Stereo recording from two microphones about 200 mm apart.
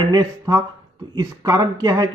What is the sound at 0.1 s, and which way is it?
Speech, 15° right (ahead or behind).